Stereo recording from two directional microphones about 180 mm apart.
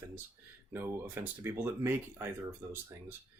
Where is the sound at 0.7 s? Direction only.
10° right (ahead or behind).